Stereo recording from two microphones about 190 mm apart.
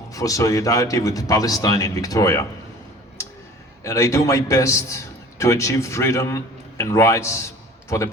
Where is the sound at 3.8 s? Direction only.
15° left (ahead or behind).